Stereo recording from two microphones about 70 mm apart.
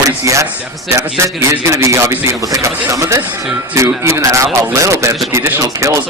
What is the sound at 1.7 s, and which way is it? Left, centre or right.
A man's voice, right.